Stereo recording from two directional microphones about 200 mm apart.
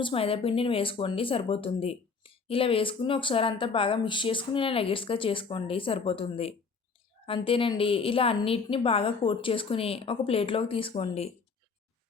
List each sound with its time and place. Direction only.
0.0 s speech: 30° left (ahead or behind)